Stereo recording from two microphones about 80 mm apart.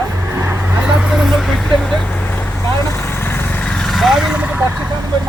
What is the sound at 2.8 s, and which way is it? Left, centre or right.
Vehicle, left.